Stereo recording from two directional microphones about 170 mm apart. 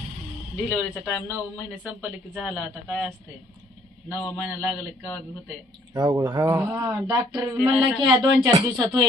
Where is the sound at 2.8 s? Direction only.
5° right (ahead or behind).